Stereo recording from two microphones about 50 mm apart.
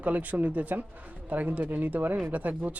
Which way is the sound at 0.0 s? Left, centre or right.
Right.